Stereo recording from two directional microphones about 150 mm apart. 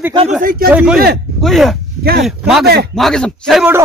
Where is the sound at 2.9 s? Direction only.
5° left (ahead or behind).